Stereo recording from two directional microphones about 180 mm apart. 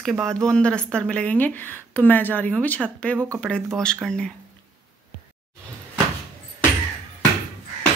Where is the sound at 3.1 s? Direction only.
15° right (ahead or behind).